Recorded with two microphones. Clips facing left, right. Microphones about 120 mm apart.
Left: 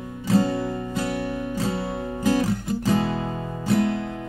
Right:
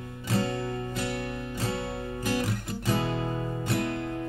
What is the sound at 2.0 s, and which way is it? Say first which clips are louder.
Music: left 9 dB; 30° left (ahead or behind).